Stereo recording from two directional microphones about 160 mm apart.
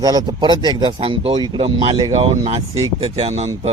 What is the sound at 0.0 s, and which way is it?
Speech, 25° right (ahead or behind).